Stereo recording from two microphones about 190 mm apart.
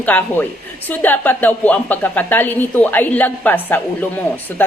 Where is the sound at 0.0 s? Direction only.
10° left (ahead or behind).